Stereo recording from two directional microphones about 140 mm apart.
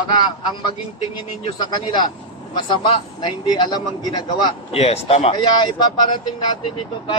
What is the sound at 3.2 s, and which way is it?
Speech, 35° left (ahead or behind).